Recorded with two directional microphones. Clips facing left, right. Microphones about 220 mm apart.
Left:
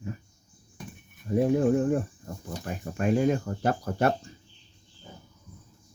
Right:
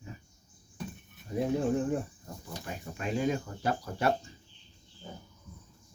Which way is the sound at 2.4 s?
50° left (ahead or behind).